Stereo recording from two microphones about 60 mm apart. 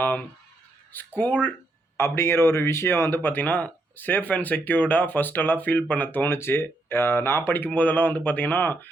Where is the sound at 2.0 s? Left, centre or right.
Left.